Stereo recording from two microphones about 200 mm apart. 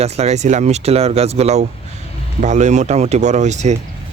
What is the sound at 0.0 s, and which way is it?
Speech, 35° right (ahead or behind).